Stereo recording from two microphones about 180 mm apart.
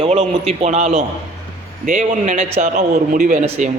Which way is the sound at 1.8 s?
50° right (ahead or behind).